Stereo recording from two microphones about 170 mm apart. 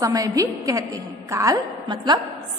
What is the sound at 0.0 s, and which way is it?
A woman's voice, 20° right (ahead or behind).